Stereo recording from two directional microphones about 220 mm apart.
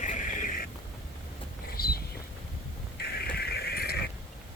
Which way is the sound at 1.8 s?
45° left (ahead or behind).